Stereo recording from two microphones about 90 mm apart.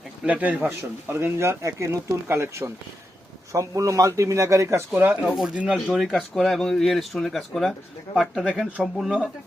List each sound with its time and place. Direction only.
0.3 s a man's voice: 15° right (ahead or behind)
0.7 s speech: 30° right (ahead or behind)
5.2 s speech: 5° right (ahead or behind)